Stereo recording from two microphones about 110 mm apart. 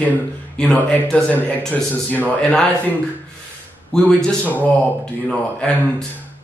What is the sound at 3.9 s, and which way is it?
Speech, 5° left (ahead or behind).